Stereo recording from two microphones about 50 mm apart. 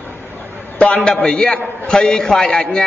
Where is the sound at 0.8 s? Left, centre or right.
Left.